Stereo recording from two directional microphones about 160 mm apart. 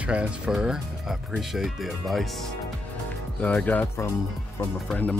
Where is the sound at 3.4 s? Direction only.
10° left (ahead or behind).